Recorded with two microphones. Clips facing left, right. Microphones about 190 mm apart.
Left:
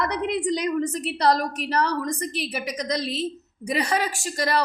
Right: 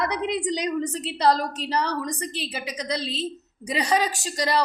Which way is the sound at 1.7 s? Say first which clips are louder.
Left 2 dB; 15° right (ahead or behind).